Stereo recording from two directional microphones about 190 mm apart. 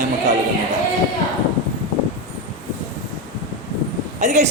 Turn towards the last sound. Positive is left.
turn(degrees=-40)  # may be behind; listen again after turning